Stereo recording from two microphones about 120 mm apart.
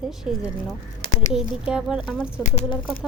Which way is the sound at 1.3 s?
5° right (ahead or behind).